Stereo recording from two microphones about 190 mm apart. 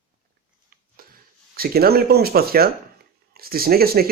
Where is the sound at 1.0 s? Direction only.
50° right (ahead or behind).